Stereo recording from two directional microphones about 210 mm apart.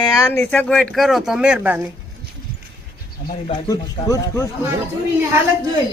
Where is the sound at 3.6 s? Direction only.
15° left (ahead or behind).